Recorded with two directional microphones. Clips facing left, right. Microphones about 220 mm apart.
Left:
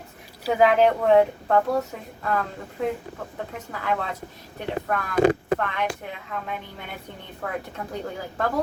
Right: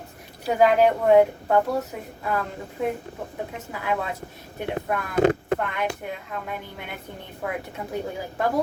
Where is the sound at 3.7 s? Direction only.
10° right (ahead or behind).